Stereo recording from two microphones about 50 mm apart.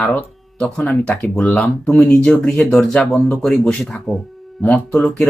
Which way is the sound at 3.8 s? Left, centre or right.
Centre.